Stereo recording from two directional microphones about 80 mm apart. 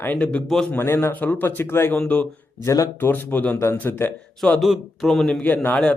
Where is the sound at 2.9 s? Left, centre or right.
Left.